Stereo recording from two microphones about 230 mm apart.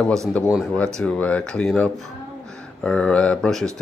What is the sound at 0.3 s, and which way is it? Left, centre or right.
Speech, centre.